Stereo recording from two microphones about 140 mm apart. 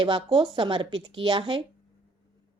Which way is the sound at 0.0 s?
35° right (ahead or behind).